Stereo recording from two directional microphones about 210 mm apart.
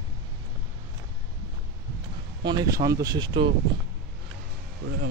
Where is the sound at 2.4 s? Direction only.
15° right (ahead or behind).